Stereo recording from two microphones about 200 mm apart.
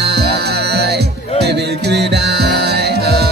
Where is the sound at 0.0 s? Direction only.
55° right (ahead or behind).